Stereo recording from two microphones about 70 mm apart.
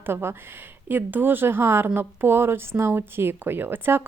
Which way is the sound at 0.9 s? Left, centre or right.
Right.